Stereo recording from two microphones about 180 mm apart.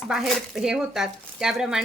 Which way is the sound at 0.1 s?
5° right (ahead or behind).